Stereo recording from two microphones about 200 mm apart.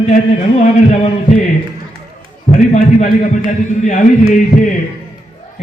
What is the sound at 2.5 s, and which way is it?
Speech, 40° left (ahead or behind).